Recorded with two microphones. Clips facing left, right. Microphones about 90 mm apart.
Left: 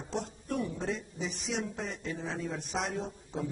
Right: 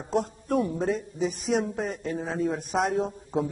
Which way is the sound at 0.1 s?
45° right (ahead or behind).